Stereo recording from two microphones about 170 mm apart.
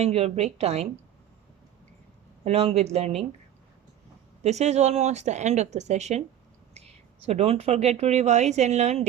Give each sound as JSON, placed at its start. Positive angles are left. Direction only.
{"t": 0.0, "sound": "speech", "side_deg": -35}
{"t": 2.4, "sound": "speech", "side_deg": -35}
{"t": 4.4, "sound": "speech", "side_deg": -40}
{"t": 7.3, "sound": "speech", "side_deg": -35}